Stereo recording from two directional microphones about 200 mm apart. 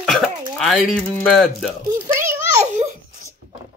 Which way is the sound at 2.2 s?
15° right (ahead or behind).